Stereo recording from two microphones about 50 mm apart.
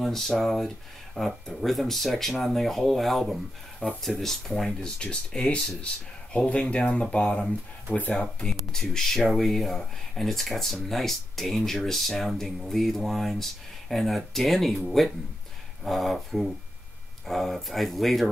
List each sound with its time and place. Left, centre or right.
0.0 s speech: centre
4.9 s speech: centre
8.2 s speech: centre
15.8 s speech: centre